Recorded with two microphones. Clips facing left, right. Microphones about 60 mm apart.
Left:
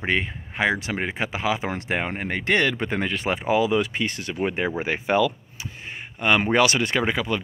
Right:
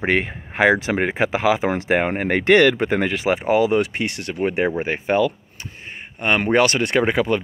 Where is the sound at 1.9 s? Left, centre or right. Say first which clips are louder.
Right 7 dB; right.